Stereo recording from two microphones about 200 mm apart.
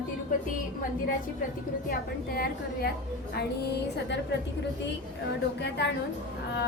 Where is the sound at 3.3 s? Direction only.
55° left (ahead or behind).